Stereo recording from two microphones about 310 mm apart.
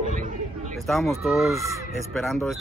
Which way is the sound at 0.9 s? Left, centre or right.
Centre.